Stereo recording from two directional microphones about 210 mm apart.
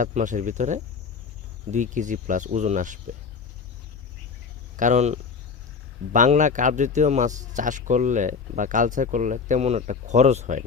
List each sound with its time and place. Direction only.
0.0 s a man's voice: 35° right (ahead or behind)
4.8 s a man's voice: 35° right (ahead or behind)